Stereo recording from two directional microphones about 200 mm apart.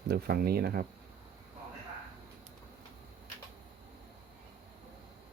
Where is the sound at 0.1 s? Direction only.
50° right (ahead or behind).